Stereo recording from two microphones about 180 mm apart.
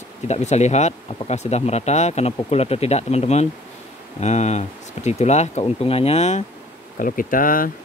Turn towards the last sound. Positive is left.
turn(degrees=50)  # may be behind; listen again after turning